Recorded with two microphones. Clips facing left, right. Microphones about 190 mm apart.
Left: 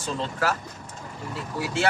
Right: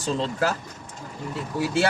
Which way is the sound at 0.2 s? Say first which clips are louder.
Left 1 dB; 25° right (ahead or behind).